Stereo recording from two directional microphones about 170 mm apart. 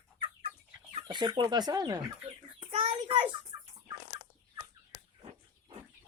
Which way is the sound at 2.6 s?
30° right (ahead or behind).